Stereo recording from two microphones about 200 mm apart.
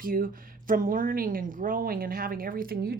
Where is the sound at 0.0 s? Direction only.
45° right (ahead or behind).